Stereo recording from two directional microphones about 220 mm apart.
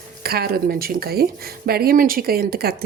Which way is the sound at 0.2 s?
45° right (ahead or behind).